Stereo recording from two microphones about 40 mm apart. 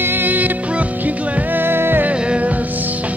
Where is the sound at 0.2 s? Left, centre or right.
Right.